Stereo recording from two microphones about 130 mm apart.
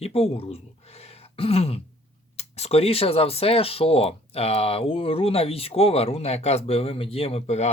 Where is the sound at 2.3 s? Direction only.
55° left (ahead or behind).